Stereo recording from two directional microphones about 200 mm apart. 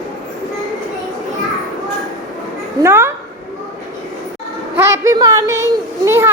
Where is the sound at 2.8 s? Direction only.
10° right (ahead or behind).